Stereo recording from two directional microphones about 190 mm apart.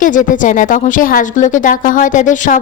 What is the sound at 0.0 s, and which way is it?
A woman's voice, 45° left (ahead or behind).